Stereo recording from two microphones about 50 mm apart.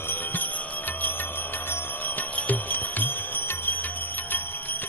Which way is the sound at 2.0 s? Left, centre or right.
Left.